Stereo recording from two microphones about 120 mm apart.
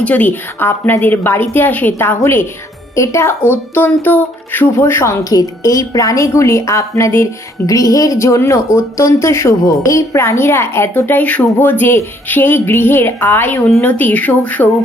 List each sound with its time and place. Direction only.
0.0 s a woman's voice: 15° left (ahead or behind)